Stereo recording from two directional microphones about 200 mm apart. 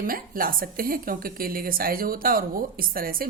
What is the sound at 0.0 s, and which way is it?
Speech, 45° right (ahead or behind).